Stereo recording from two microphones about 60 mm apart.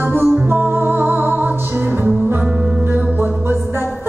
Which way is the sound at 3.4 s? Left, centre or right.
Right.